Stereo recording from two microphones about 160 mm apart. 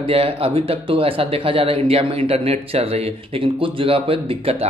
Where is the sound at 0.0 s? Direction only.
35° right (ahead or behind).